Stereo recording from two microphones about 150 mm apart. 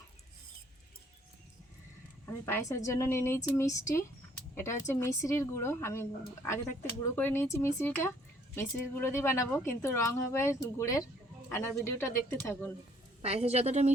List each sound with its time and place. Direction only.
2.2 s a woman's voice: 20° left (ahead or behind)
13.2 s a woman's voice: 45° right (ahead or behind)